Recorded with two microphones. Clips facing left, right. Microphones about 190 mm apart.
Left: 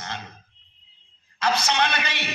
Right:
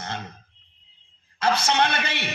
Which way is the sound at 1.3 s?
55° right (ahead or behind).